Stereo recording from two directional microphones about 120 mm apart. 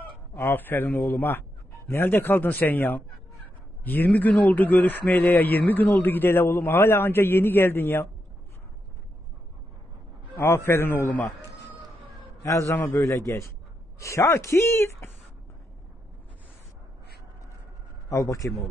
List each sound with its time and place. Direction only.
0.0 s a man's voice: 15° left (ahead or behind)
10.3 s speech: 20° left (ahead or behind)
12.4 s speech: 25° left (ahead or behind)
18.1 s speech: 25° left (ahead or behind)